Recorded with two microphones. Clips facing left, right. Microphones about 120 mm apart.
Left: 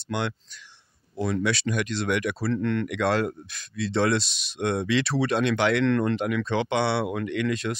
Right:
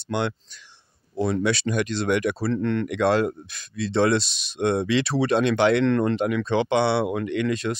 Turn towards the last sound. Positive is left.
turn(degrees=-30)  # may be behind; listen again after turning